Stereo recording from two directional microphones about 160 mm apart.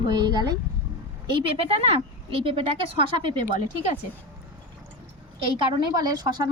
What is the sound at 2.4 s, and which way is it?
Speech, 35° right (ahead or behind).